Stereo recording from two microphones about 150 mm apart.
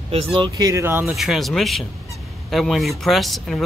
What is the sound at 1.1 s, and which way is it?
Speech, centre (ahead or behind).